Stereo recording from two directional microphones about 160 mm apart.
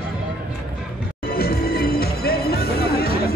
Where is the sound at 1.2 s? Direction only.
75° left (ahead or behind).